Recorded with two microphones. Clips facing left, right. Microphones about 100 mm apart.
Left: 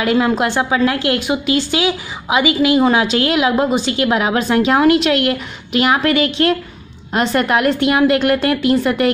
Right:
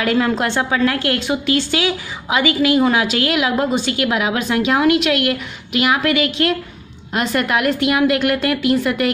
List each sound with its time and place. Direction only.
0.0 s a woman's voice: 20° left (ahead or behind)